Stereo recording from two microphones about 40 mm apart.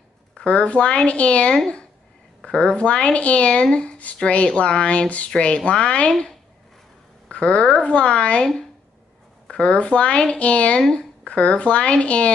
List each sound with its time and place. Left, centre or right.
0.5 s speech: left
7.2 s speech: left
9.5 s speech: left